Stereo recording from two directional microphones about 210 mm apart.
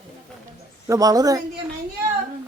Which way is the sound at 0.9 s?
15° right (ahead or behind).